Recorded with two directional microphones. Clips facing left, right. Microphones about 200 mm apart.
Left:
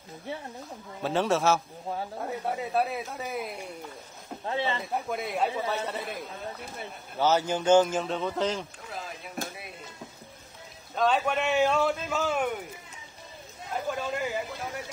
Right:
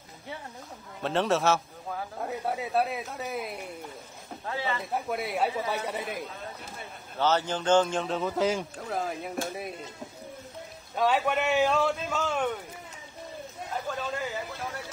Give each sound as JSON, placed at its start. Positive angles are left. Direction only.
{"t": 1.0, "sound": "speech", "side_deg": 0}
{"t": 4.5, "sound": "speech", "side_deg": 25}
{"t": 4.9, "sound": "speech", "side_deg": -5}
{"t": 7.2, "sound": "speech", "side_deg": 10}
{"t": 11.0, "sound": "speech", "side_deg": -5}
{"t": 13.8, "sound": "speech", "side_deg": 15}